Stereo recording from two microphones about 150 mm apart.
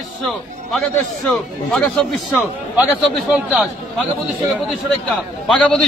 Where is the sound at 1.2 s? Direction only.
5° left (ahead or behind).